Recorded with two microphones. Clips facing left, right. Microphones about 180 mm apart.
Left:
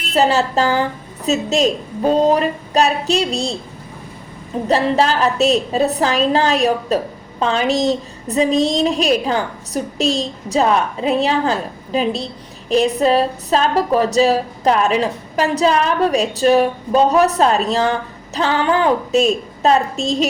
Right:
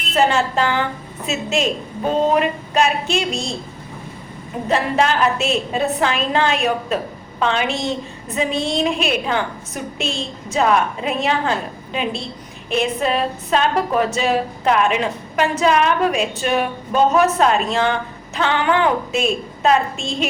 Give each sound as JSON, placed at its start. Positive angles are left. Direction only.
{"t": 0.1, "sound": "a woman's voice", "side_deg": 35}
{"t": 4.7, "sound": "a woman's voice", "side_deg": 35}